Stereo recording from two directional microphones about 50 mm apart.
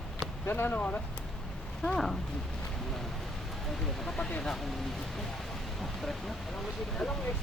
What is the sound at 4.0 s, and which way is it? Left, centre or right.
Speech, centre.